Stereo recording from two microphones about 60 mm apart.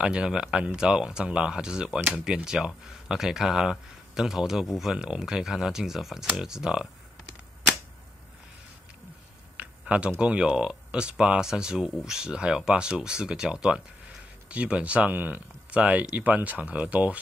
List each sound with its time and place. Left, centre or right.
0.0 s speech: centre
9.6 s speech: right